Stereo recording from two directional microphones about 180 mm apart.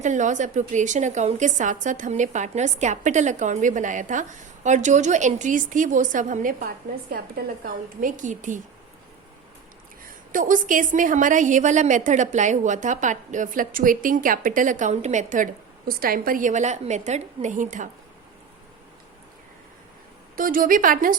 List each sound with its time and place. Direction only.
0.0 s a woman's voice: 45° right (ahead or behind)
10.3 s a woman's voice: 50° right (ahead or behind)
15.9 s a woman's voice: 55° right (ahead or behind)
20.3 s a woman's voice: 50° right (ahead or behind)